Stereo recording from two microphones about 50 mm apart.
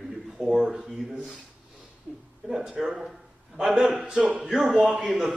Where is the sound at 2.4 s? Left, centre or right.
Centre.